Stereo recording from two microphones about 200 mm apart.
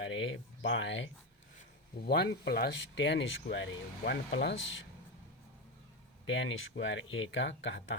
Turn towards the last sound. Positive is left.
turn(degrees=70)  # may be behind; listen again after turning